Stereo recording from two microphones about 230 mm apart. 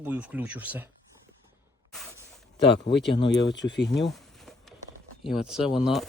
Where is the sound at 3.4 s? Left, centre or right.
Left.